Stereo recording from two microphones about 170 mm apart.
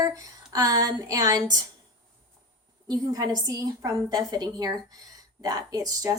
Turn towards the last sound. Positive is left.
turn(degrees=-20)  # may be behind; listen again after turning